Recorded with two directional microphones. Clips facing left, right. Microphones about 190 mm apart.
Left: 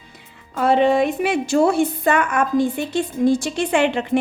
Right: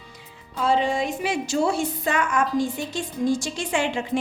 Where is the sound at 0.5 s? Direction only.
60° left (ahead or behind).